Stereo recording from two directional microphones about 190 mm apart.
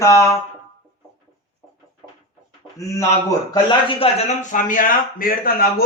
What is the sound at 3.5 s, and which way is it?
A man's voice, 25° left (ahead or behind).